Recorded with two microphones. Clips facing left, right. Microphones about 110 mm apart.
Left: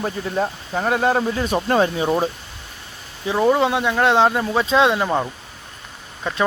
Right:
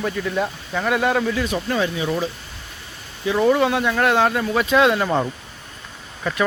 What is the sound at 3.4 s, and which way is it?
Speech, 20° left (ahead or behind).